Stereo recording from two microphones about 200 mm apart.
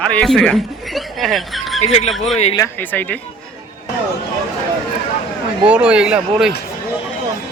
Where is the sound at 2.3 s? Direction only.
30° left (ahead or behind).